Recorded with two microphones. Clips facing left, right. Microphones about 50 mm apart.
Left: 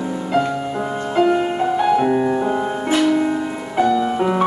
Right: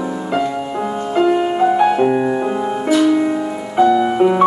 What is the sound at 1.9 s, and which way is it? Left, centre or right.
Music, centre.